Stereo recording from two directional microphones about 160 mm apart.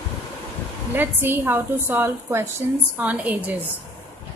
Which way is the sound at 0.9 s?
15° right (ahead or behind).